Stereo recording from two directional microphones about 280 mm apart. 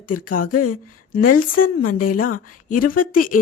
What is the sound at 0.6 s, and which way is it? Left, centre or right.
Speech, left.